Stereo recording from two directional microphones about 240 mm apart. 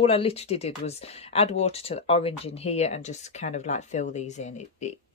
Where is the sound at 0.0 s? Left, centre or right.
Left.